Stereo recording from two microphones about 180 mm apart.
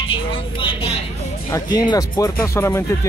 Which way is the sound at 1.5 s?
20° left (ahead or behind).